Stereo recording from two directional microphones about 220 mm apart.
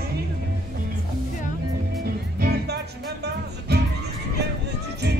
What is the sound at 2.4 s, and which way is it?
Music, 50° right (ahead or behind).